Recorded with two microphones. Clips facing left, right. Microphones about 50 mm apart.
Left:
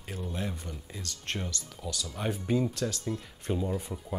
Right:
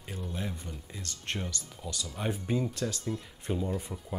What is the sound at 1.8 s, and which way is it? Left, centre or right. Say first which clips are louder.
Speech: left 2 dB; centre.